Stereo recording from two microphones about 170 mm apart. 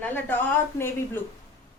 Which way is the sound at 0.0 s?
10° left (ahead or behind).